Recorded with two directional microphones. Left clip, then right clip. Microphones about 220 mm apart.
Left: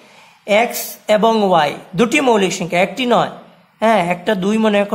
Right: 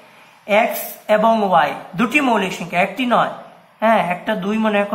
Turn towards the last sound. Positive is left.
turn(degrees=50)  # may be behind; listen again after turning